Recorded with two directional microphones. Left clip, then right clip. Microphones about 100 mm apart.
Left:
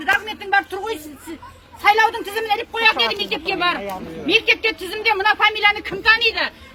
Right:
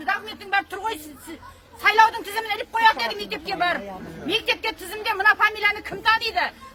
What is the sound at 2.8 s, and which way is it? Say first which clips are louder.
A woman's voice: left 2 dB; 50° right (ahead or behind).